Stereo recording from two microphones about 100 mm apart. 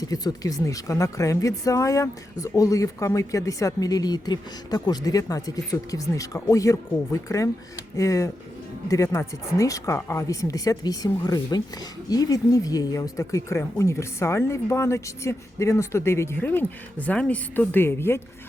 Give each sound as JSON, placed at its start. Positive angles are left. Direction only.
{"t": 0.0, "sound": "a woman's voice", "side_deg": 40}